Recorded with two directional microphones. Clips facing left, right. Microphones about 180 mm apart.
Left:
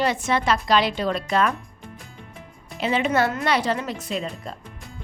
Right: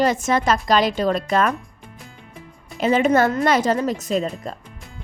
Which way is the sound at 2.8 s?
45° right (ahead or behind).